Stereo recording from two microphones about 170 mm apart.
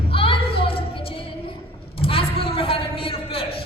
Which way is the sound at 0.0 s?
35° left (ahead or behind).